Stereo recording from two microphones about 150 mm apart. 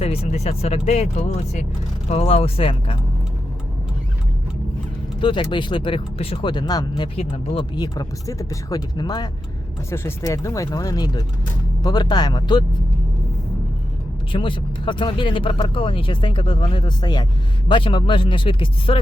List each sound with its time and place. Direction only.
0.0 s speech: 40° left (ahead or behind)
5.2 s speech: 30° left (ahead or behind)
9.9 s speech: 15° left (ahead or behind)
14.3 s speech: 35° left (ahead or behind)